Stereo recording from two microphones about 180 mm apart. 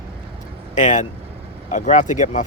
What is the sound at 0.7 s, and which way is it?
Speech, 45° left (ahead or behind).